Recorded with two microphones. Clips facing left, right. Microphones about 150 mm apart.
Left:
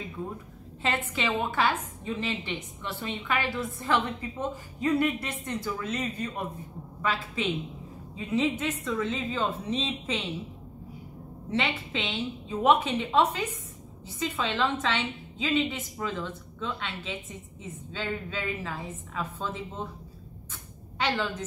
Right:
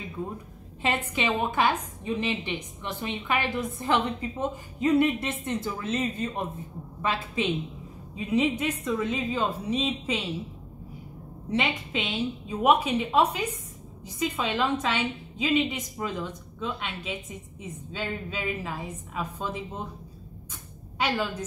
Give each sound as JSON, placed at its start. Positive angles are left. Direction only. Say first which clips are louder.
{"t": 0.8, "sound": "a woman's voice", "louder": "right 2 dB", "side_deg": -15}
{"t": 11.5, "sound": "a woman's voice", "louder": "right 2 dB", "side_deg": -15}
{"t": 21.0, "sound": "a woman's voice", "louder": "right 1 dB", "side_deg": -10}